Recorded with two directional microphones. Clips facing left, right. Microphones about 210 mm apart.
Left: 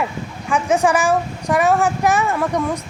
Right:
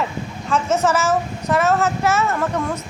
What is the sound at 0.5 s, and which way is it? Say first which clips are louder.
A child's voice: left 2 dB; 15° left (ahead or behind).